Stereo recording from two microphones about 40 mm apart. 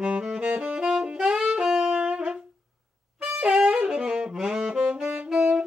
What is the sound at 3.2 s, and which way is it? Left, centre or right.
Saxophone, right.